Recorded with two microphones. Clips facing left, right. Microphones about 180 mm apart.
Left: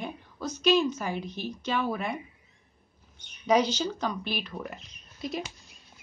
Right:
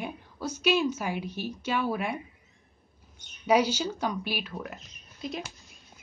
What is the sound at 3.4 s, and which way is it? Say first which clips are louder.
Speech: even; 10° right (ahead or behind).